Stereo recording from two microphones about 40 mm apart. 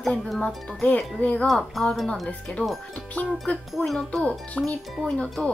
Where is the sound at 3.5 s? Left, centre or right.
Left.